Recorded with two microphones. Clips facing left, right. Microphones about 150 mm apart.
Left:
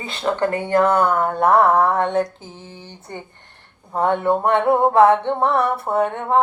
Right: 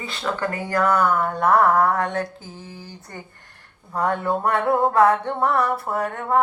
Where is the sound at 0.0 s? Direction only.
25° left (ahead or behind).